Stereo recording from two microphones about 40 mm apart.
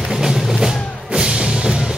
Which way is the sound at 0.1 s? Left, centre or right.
Centre.